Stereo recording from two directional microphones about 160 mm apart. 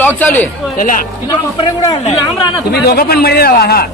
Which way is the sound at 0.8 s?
55° left (ahead or behind).